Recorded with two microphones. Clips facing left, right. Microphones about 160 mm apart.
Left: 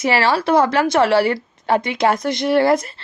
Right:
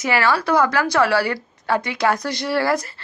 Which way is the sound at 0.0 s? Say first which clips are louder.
Left 2 dB; 25° left (ahead or behind).